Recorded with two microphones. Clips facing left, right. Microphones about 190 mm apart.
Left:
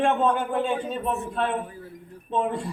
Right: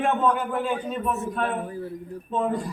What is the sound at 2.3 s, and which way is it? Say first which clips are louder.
Speech: even; 25° left (ahead or behind).